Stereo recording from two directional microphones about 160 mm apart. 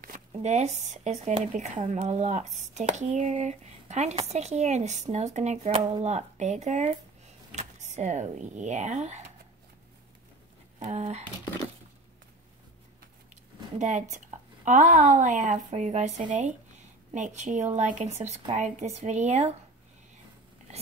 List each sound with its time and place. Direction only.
0.3 s speech: 45° right (ahead or behind)
5.8 s speech: 30° right (ahead or behind)
6.0 s speech: 45° right (ahead or behind)
10.8 s speech: 45° right (ahead or behind)
13.7 s speech: 50° right (ahead or behind)